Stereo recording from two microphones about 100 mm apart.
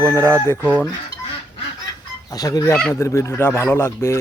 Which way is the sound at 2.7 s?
15° left (ahead or behind).